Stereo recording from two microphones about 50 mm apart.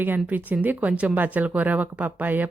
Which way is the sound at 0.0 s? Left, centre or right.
Right.